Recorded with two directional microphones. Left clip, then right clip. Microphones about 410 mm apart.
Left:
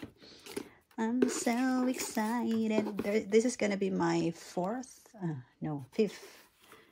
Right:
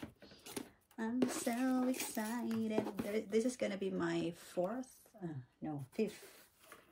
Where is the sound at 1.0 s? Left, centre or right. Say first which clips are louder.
Left 7 dB; centre.